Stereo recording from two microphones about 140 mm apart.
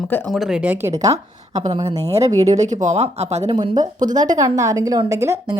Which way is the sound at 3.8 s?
65° right (ahead or behind).